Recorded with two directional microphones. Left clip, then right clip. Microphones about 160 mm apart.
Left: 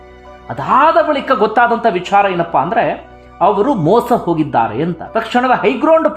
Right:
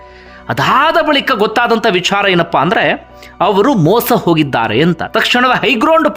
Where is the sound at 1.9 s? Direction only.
25° right (ahead or behind).